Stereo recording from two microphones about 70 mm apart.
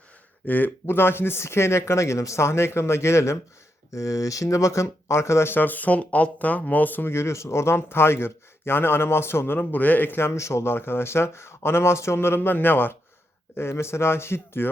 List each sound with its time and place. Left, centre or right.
0.4 s speech: left
9.6 s speech: left